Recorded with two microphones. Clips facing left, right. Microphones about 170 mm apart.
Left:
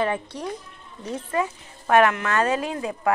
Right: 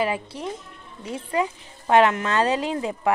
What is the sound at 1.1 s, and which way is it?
A woman's voice, 15° right (ahead or behind).